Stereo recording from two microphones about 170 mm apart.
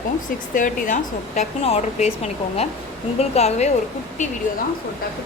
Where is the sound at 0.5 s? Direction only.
50° left (ahead or behind).